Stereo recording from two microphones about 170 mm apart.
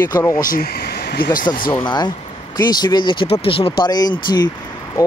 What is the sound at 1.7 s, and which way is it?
Speech, 25° left (ahead or behind).